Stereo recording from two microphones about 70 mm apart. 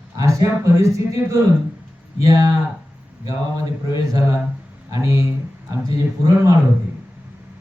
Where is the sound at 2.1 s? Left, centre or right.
Right.